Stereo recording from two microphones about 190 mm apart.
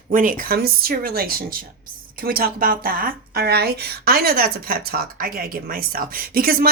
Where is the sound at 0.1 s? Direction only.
45° right (ahead or behind).